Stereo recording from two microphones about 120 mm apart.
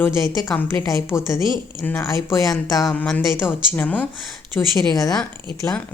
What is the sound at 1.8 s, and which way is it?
Speech, 15° left (ahead or behind).